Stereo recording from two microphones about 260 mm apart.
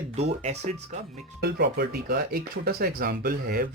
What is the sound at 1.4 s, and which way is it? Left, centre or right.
A man's voice, right.